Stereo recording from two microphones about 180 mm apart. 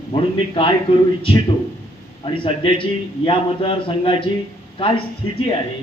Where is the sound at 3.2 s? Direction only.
30° left (ahead or behind).